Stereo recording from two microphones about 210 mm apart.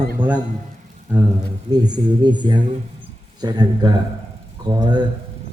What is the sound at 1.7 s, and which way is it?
A man's voice, 20° right (ahead or behind).